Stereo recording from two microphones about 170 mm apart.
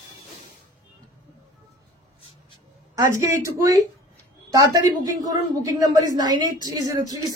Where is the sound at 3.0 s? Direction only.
20° right (ahead or behind).